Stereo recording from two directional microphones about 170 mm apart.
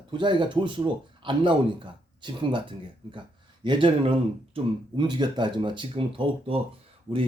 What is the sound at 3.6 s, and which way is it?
Speech, 30° right (ahead or behind).